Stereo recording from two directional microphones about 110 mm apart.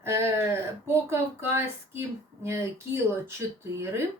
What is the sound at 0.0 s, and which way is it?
Speech, 25° right (ahead or behind).